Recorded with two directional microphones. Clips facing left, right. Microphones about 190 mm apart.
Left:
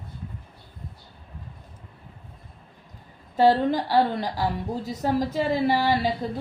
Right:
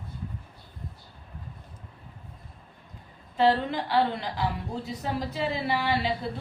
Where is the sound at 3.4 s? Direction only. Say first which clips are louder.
Left 4 dB; 40° left (ahead or behind).